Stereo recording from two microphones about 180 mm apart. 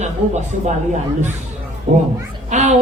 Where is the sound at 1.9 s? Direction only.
45° right (ahead or behind).